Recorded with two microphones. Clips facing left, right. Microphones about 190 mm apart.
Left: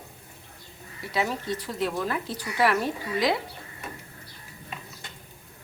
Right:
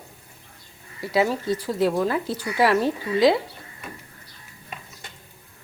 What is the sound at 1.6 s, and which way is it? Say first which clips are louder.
A woman's voice: right 8 dB; 35° right (ahead or behind).